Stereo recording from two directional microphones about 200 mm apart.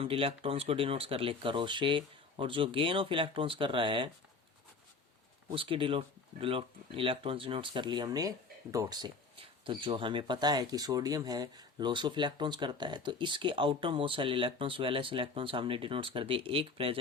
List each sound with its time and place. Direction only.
0.0 s speech: 30° right (ahead or behind)
5.5 s speech: 25° right (ahead or behind)